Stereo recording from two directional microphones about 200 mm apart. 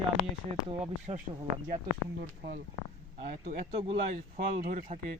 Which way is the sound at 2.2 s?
50° right (ahead or behind).